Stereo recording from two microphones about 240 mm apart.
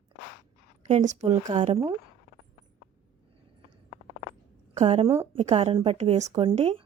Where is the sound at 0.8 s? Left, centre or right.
Right.